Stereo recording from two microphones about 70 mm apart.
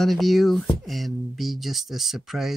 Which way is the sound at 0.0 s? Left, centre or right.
Centre.